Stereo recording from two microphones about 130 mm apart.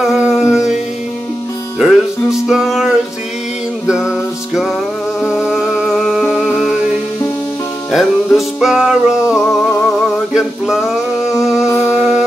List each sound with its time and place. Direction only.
0.1 s music: 5° right (ahead or behind)
1.8 s music: 5° right (ahead or behind)
5.2 s music: 5° right (ahead or behind)
7.9 s music: centre (ahead or behind)
9.7 s a sound: 20° left (ahead or behind)
10.3 s male singing: 5° right (ahead or behind)
11.3 s music: 5° right (ahead or behind)